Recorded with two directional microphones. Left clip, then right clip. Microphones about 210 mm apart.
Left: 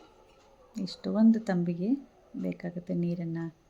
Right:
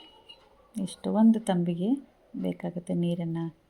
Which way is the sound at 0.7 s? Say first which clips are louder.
Right 1 dB; 25° left (ahead or behind).